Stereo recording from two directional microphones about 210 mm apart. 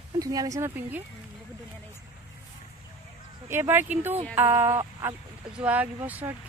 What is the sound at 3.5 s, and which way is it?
Speech, 10° right (ahead or behind).